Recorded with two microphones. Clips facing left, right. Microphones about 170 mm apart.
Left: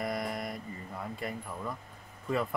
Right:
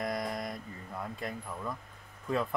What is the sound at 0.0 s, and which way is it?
Mantra, 5° left (ahead or behind).